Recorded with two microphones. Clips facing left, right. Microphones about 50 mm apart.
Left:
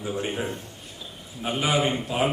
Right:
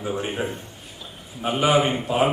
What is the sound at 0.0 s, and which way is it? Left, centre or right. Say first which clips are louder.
Speech: right 2 dB; centre.